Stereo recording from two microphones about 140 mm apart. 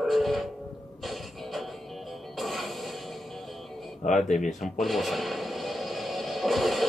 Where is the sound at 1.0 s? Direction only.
Centre (ahead or behind).